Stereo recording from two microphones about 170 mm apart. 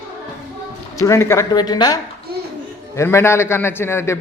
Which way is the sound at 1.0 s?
20° left (ahead or behind).